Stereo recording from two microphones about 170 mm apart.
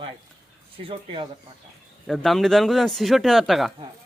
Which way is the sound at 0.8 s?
30° right (ahead or behind).